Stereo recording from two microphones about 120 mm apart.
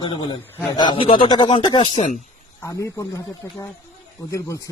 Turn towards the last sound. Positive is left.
turn(degrees=25)  # may be behind; listen again after turning